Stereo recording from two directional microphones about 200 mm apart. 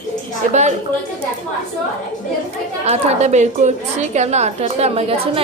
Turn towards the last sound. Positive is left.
turn(degrees=-30)  # may be behind; listen again after turning